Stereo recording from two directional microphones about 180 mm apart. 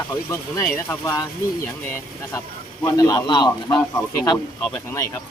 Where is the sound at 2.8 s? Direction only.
20° left (ahead or behind).